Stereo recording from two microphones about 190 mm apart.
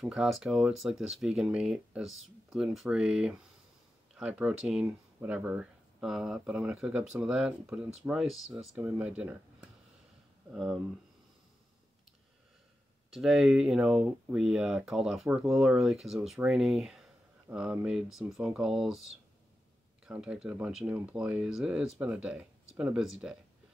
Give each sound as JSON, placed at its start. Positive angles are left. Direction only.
{"t": 0.0, "sound": "speech", "side_deg": 0}
{"t": 13.1, "sound": "speech", "side_deg": 0}